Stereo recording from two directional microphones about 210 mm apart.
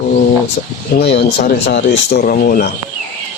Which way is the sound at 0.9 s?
50° left (ahead or behind).